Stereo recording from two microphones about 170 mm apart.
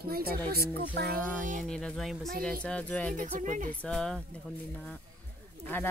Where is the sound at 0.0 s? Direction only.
65° right (ahead or behind).